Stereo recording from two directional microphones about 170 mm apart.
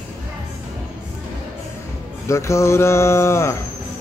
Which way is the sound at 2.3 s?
15° left (ahead or behind).